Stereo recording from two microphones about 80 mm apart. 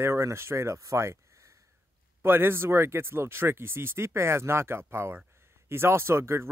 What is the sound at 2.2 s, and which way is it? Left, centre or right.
Speech, right.